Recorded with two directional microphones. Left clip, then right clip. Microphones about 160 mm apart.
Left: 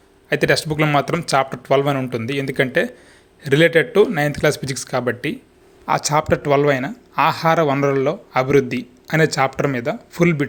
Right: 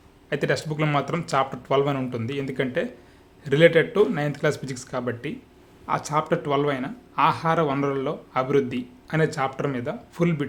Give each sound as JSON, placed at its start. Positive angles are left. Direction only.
{"t": 0.3, "sound": "speech", "side_deg": 25}